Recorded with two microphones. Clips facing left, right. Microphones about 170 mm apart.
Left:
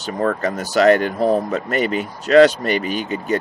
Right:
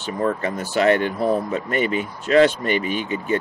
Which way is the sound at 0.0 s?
45° left (ahead or behind).